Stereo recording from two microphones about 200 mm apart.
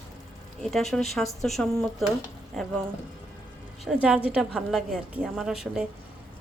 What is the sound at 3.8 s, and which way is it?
A woman's voice, 5° right (ahead or behind).